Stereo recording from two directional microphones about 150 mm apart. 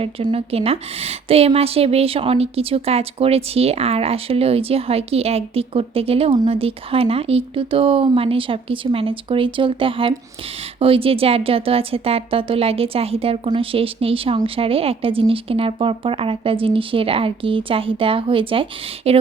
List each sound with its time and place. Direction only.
0.0 s a woman's voice: 40° right (ahead or behind)